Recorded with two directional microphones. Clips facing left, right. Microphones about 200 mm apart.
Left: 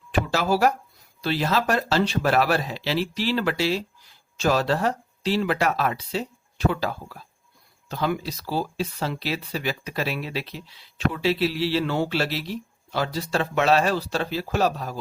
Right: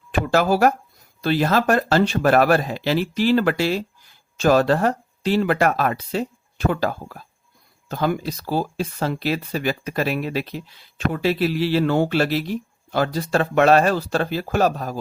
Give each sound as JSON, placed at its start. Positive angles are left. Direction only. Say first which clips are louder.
{"t": 0.1, "sound": "speech", "louder": "right 4 dB", "side_deg": -50}